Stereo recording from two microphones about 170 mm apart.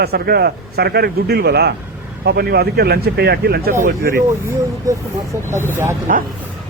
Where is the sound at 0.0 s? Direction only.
65° right (ahead or behind).